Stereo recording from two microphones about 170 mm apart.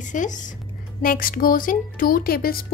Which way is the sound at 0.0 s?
45° left (ahead or behind).